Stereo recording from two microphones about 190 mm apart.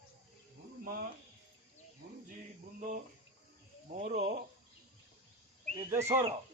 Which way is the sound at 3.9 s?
40° right (ahead or behind).